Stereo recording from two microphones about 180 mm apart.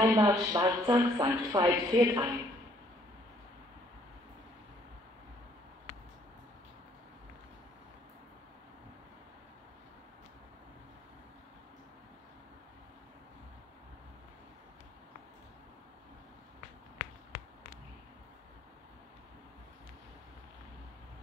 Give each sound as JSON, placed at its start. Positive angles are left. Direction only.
{"t": 0.0, "sound": "speech", "side_deg": -20}